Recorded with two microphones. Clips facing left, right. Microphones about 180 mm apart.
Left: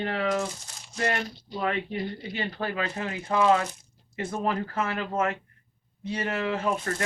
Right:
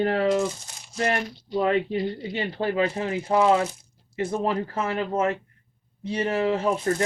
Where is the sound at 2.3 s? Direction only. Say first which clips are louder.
Right 5 dB; 25° right (ahead or behind).